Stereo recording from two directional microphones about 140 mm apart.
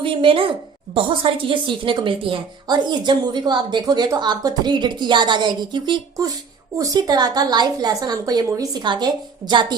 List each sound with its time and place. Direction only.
0.0 s a woman's voice: 40° right (ahead or behind)